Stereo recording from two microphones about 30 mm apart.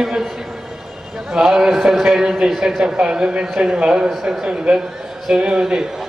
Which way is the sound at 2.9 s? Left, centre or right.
Right.